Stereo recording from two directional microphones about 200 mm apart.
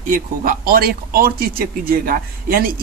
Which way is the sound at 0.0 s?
45° right (ahead or behind).